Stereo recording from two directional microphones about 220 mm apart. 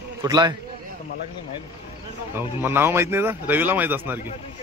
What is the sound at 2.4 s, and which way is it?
Speech, 10° right (ahead or behind).